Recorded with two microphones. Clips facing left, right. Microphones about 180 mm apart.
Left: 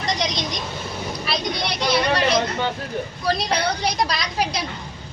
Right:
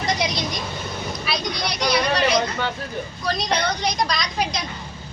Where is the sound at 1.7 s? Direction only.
Centre (ahead or behind).